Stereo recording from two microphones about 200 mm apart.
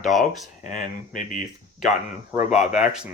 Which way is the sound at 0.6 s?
40° left (ahead or behind).